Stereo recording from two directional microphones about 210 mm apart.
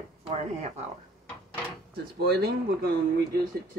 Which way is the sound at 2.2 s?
45° right (ahead or behind).